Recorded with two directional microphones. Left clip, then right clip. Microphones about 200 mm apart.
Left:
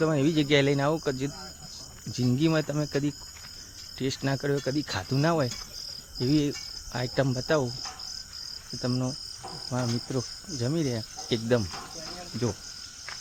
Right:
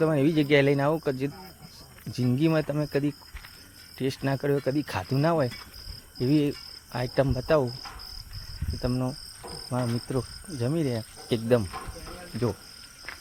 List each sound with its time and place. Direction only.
0.0 s cricket: centre (ahead or behind)
8.8 s cricket: 5° left (ahead or behind)